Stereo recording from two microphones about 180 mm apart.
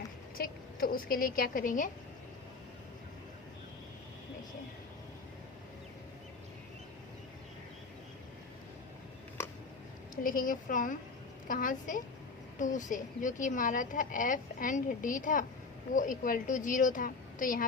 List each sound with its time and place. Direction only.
0.3 s speech: 55° left (ahead or behind)
10.2 s a woman's voice: 50° left (ahead or behind)